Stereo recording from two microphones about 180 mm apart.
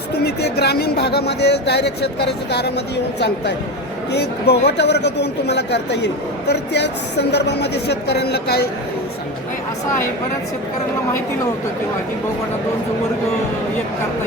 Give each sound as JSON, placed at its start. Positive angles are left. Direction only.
{"t": 0.1, "sound": "speech", "side_deg": 65}